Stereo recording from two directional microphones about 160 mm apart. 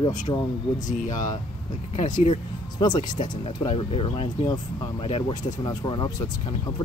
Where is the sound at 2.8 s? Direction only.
25° left (ahead or behind).